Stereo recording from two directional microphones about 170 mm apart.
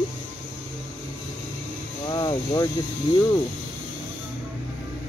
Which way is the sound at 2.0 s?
25° left (ahead or behind).